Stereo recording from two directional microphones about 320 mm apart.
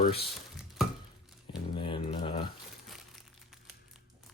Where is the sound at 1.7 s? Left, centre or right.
Centre.